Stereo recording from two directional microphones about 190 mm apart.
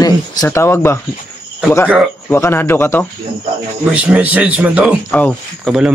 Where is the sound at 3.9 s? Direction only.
5° right (ahead or behind).